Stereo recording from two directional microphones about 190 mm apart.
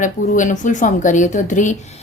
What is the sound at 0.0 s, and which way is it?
A woman's voice, 40° left (ahead or behind).